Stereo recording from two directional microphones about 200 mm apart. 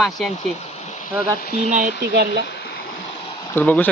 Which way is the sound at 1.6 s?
35° right (ahead or behind).